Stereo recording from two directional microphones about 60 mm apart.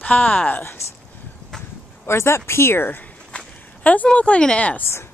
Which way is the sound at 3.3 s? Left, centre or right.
Left.